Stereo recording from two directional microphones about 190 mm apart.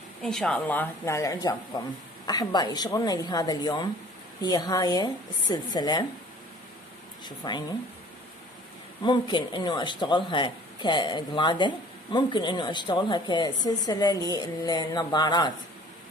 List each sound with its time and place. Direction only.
0.2 s speech: centre (ahead or behind); by 6.0 s 20° left (ahead or behind)
7.2 s speech: 20° left (ahead or behind)
9.0 s speech: 25° left (ahead or behind)